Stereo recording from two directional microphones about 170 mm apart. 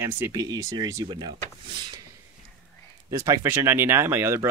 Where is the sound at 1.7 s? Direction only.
30° right (ahead or behind).